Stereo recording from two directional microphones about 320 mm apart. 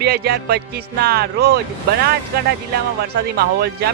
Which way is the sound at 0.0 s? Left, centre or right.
Right.